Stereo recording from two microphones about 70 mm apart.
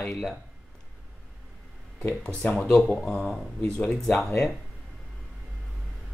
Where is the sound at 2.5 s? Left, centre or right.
Centre.